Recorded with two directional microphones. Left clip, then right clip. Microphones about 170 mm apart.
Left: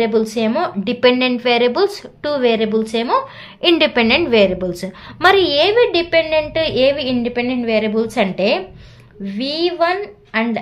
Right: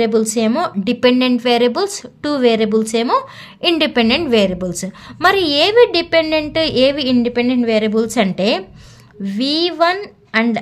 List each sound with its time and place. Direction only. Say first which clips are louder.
0.0 s a woman's voice: right 1 dB; 45° right (ahead or behind)
3.6 s a woman's voice: left 1 dB; 30° right (ahead or behind); by 10.6 s 50° right (ahead or behind)